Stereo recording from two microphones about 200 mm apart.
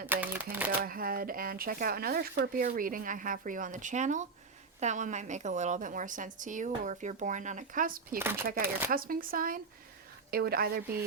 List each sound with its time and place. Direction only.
0.1 s typewriter: 10° right (ahead or behind)
0.9 s a woman's voice: 45° right (ahead or behind)
8.2 s speech: 10° right (ahead or behind)
8.4 s speech: 45° right (ahead or behind)